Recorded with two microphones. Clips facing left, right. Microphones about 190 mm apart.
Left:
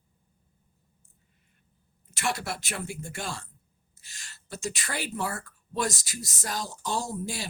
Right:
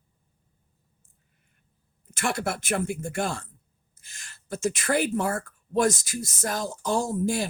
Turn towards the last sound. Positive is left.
turn(degrees=-55)  # may be behind; listen again after turning